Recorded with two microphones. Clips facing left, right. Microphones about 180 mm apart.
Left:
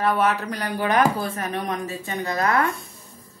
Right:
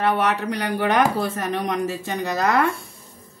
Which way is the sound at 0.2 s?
70° right (ahead or behind).